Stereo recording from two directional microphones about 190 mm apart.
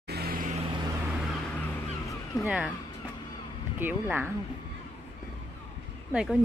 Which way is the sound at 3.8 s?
10° right (ahead or behind).